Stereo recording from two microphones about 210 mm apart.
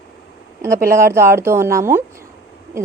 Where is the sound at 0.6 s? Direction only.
15° right (ahead or behind).